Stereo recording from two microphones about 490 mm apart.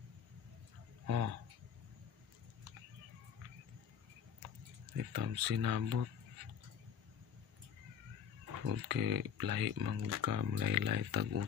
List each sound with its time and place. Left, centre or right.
1.0 s speech: right
4.9 s speech: right
8.6 s speech: right